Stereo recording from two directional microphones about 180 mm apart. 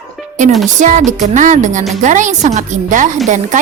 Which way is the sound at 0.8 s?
45° right (ahead or behind).